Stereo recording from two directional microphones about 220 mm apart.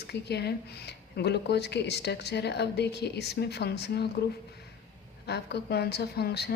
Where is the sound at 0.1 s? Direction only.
50° left (ahead or behind).